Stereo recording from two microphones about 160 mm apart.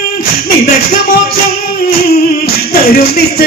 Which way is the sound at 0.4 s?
65° left (ahead or behind).